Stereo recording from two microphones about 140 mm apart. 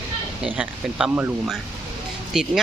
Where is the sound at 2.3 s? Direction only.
Centre (ahead or behind).